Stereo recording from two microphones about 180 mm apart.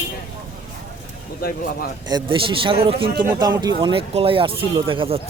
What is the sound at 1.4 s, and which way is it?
Speech, 55° left (ahead or behind).